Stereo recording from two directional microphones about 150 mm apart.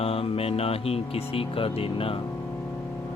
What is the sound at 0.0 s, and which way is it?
Speech, 40° left (ahead or behind).